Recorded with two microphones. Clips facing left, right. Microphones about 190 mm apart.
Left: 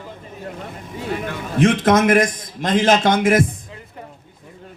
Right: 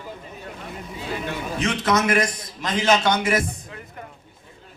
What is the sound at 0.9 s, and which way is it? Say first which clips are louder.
A man's voice: left 4 dB; 50° left (ahead or behind).